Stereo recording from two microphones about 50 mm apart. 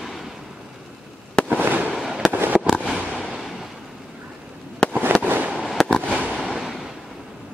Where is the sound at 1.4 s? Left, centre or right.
Right.